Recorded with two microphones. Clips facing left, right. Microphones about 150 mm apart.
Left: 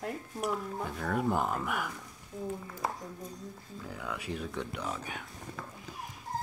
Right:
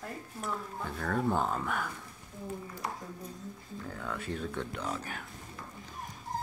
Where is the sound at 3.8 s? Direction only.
5° left (ahead or behind).